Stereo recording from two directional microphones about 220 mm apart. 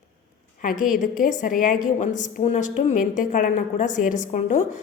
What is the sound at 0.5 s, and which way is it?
A woman's voice, 35° left (ahead or behind).